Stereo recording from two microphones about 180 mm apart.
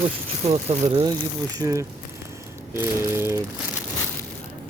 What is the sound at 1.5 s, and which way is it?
Speech, 20° right (ahead or behind).